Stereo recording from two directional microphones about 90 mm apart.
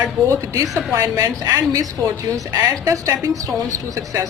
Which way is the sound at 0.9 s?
35° right (ahead or behind).